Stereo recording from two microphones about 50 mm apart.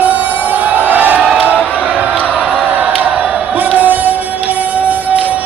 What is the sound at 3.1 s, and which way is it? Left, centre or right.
Music, right.